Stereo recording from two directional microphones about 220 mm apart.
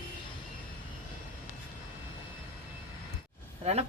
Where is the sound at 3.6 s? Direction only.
30° right (ahead or behind).